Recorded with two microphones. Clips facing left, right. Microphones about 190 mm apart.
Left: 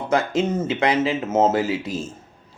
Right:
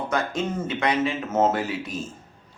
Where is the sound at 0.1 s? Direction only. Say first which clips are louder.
Left 8 dB; 25° left (ahead or behind).